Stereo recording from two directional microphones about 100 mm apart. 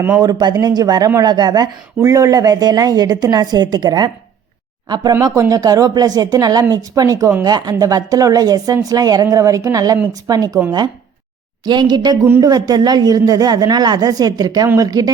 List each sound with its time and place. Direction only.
0.2 s speech: 45° right (ahead or behind)
5.3 s speech: 35° right (ahead or behind)
11.6 s speech: 45° right (ahead or behind)